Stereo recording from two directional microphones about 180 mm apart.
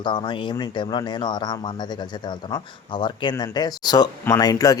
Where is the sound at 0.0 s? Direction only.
25° left (ahead or behind).